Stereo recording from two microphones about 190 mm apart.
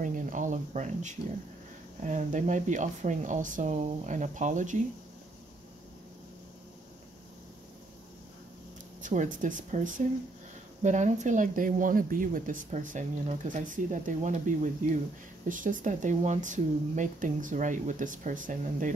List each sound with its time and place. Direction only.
0.0 s speech: 40° right (ahead or behind)
9.0 s speech: 40° right (ahead or behind)